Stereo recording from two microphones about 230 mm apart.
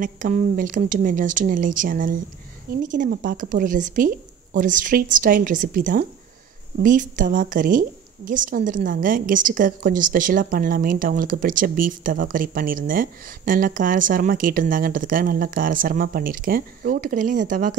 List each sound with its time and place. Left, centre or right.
0.0 s speech: right